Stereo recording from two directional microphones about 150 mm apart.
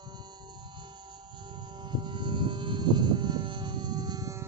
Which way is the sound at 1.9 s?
30° right (ahead or behind).